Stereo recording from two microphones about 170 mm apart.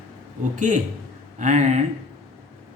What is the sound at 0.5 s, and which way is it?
A man's voice, 45° right (ahead or behind).